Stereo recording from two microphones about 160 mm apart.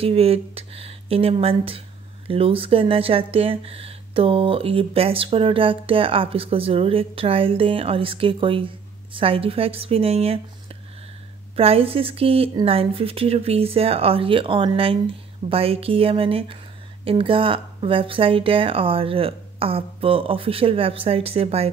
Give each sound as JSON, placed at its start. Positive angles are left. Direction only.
{"t": 0.0, "sound": "speech", "side_deg": -35}
{"t": 11.5, "sound": "speech", "side_deg": -35}